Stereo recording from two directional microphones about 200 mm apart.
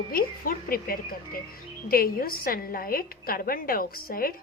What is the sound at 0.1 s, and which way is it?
A woman's voice, 45° left (ahead or behind).